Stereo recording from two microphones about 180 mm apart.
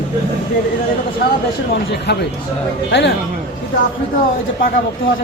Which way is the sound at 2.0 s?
70° left (ahead or behind).